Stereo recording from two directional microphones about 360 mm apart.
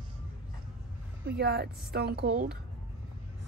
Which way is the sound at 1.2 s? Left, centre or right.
Right.